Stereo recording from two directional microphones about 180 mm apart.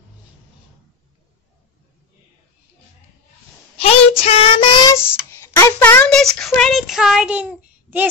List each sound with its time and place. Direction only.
3.7 s child singing: 35° left (ahead or behind)
4.8 s child singing: 15° left (ahead or behind); by 8.1 s 10° right (ahead or behind)